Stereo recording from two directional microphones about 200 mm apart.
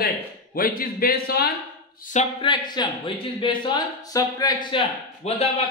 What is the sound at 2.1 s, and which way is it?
Speech, 25° left (ahead or behind).